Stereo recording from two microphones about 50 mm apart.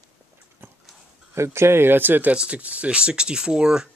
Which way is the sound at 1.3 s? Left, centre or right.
Right.